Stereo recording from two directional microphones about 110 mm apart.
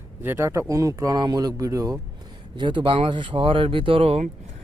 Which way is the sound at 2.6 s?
45° right (ahead or behind).